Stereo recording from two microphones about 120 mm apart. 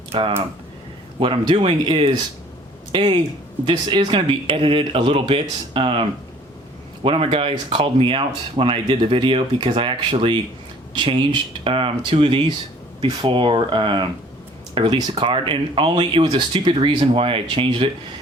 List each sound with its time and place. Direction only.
0.1 s speech: 50° right (ahead or behind)